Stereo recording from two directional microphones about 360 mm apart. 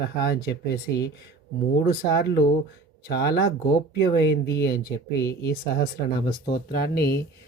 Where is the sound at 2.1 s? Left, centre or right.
Left.